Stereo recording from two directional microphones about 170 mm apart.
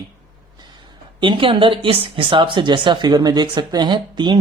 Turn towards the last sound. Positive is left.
turn(degrees=-25)  # may be behind; listen again after turning